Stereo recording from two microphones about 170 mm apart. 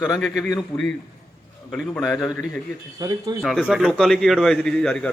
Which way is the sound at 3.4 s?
Centre (ahead or behind).